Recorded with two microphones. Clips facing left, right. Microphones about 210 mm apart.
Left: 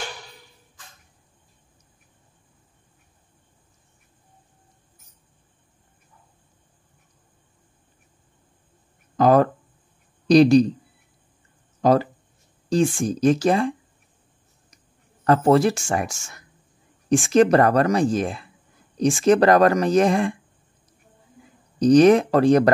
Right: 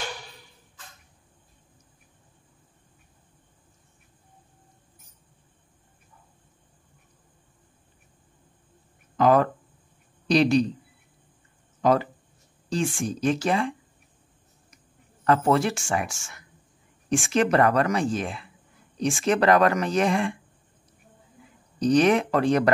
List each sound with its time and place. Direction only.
9.1 s speech: 40° left (ahead or behind)
11.8 s speech: 35° left (ahead or behind)
15.2 s speech: 35° left (ahead or behind)
21.7 s speech: 40° left (ahead or behind)